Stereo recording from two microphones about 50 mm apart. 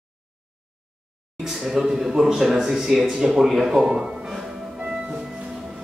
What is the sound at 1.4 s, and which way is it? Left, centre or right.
Speech, centre.